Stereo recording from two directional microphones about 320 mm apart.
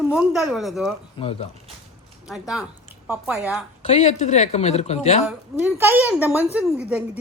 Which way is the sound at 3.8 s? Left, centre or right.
Centre.